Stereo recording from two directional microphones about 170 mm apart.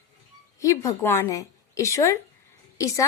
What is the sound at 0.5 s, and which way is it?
A woman's voice, 20° left (ahead or behind).